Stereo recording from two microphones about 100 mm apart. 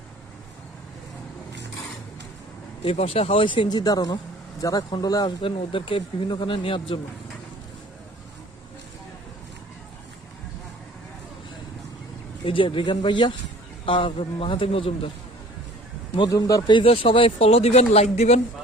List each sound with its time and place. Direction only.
2.8 s speech: 80° left; by 5.3 s 40° left (ahead or behind)
5.4 s speech: 65° left (ahead or behind)
12.5 s speech: 60° left (ahead or behind)
16.3 s speech: 35° left (ahead or behind)
16.6 s speech: 50° left (ahead or behind)
16.9 s speech: 65° left (ahead or behind); by 18.3 s 90° left